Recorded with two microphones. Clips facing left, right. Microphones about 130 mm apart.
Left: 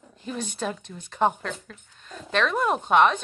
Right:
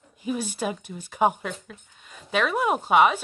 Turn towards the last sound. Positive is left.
turn(degrees=-5)  # may be behind; listen again after turning